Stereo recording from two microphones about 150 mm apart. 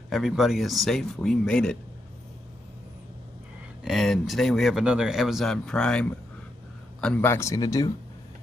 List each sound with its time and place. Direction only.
0.1 s speech: centre (ahead or behind)
3.8 s a man's voice: centre (ahead or behind)
7.2 s speech: 20° left (ahead or behind)